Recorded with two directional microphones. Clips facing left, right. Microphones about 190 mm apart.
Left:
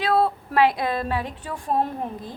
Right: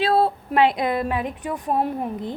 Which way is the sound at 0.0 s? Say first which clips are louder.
Right 2 dB; 30° right (ahead or behind).